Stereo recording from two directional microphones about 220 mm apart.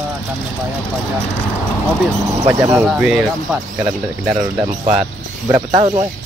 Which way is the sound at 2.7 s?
5° right (ahead or behind).